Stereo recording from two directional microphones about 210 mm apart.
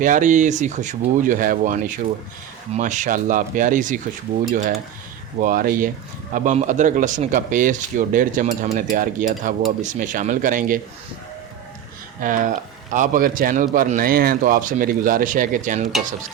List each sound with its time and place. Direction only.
0.0 s speech: 40° right (ahead or behind)
12.2 s speech: 40° right (ahead or behind)